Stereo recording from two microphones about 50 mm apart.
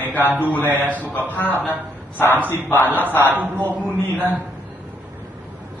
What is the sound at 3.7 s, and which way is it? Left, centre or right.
Speech, right.